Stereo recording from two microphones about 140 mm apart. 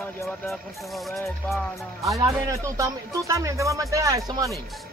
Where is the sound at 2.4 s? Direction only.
25° right (ahead or behind).